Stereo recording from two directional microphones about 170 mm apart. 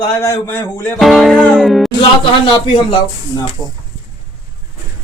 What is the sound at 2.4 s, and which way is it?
A man's voice, 30° left (ahead or behind).